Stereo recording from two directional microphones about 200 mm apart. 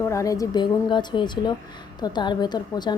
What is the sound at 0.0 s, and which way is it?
A woman's voice, 15° left (ahead or behind).